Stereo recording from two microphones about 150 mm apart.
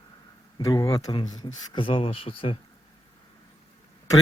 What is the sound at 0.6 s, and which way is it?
Speech, 25° left (ahead or behind).